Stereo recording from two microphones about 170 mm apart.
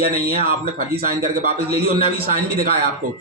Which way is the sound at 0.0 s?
65° right (ahead or behind).